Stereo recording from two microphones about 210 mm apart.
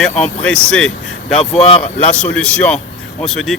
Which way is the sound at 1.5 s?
30° left (ahead or behind).